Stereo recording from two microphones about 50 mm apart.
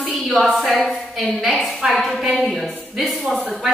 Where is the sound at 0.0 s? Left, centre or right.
Right.